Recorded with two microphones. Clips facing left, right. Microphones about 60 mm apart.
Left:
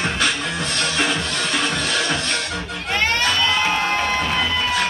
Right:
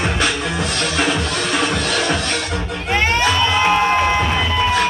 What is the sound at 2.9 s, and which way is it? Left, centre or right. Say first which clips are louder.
Music: right 3 dB; centre.